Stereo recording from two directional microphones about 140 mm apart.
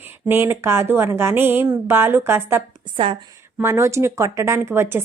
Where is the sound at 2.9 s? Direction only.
40° right (ahead or behind).